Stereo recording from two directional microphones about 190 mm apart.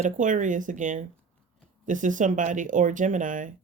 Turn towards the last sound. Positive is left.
turn(degrees=-45)  # may be behind; listen again after turning